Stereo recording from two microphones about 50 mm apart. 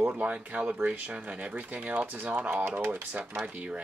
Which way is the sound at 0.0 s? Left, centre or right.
Right.